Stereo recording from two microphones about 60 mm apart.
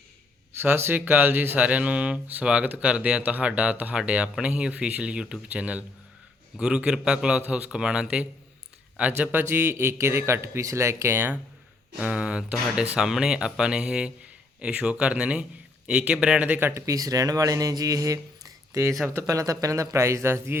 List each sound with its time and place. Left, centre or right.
0.6 s a man's voice: right
11.9 s speech: centre
16.7 s speech: right